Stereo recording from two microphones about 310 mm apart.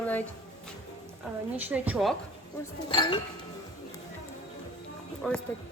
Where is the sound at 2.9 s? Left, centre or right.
Centre.